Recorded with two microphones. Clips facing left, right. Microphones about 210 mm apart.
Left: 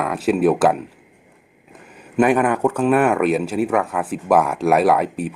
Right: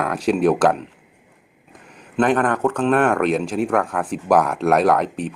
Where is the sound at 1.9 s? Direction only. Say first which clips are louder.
Left 2 dB; 10° left (ahead or behind).